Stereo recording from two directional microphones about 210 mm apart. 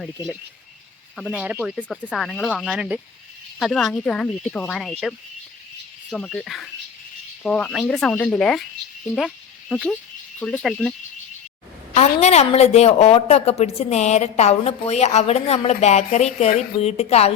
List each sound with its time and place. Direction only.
1.1 s speech: 5° right (ahead or behind)
11.9 s a woman's voice: 30° left (ahead or behind)